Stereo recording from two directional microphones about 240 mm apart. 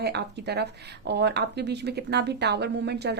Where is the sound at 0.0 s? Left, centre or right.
Right.